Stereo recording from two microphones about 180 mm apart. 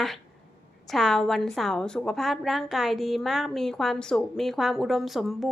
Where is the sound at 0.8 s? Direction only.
Centre (ahead or behind).